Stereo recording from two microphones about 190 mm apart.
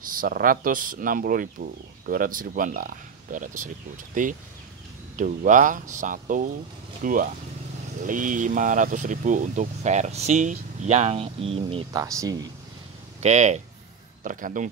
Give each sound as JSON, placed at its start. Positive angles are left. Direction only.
{"t": 0.0, "sound": "speech", "side_deg": -45}
{"t": 11.9, "sound": "speech", "side_deg": -20}
{"t": 13.2, "sound": "speech", "side_deg": -35}